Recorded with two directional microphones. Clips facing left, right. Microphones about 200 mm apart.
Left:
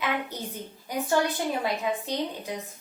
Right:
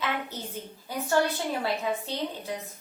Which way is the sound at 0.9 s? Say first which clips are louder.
Left 3 dB; 15° left (ahead or behind).